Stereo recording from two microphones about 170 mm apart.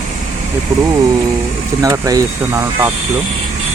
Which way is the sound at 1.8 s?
20° right (ahead or behind).